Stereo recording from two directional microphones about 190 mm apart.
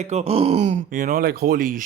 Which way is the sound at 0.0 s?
35° right (ahead or behind).